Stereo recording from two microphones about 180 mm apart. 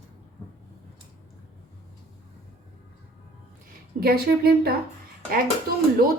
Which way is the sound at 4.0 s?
60° right (ahead or behind).